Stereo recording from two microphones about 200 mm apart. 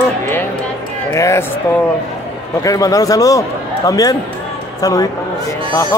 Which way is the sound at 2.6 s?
15° left (ahead or behind).